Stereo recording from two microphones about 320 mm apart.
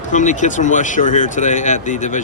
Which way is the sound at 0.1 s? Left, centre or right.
Left.